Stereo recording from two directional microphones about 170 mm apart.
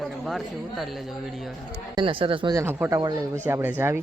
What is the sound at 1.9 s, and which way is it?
Speech, 30° right (ahead or behind).